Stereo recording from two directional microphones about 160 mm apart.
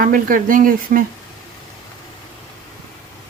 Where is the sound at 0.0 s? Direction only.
60° right (ahead or behind).